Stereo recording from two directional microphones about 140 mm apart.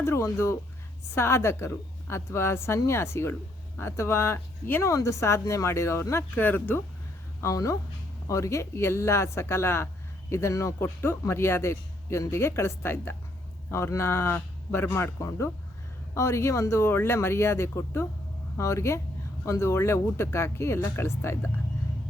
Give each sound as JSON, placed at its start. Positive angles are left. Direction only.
{"t": 0.0, "sound": "a man's voice", "side_deg": 20}